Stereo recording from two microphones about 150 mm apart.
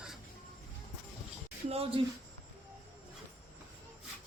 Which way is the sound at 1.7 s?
40° right (ahead or behind).